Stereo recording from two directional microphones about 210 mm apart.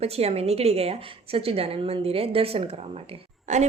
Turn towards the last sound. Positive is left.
turn(degrees=-35)  # may be behind; listen again after turning